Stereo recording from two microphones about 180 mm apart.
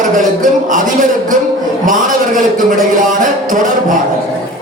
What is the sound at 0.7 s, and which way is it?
Speech, 45° right (ahead or behind).